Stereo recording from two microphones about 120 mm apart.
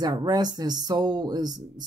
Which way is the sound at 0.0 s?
35° right (ahead or behind).